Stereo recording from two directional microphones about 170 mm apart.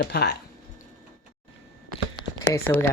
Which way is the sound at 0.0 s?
70° left (ahead or behind).